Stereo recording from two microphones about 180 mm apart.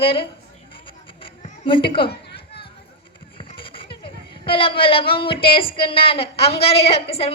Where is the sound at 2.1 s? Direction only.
65° left (ahead or behind).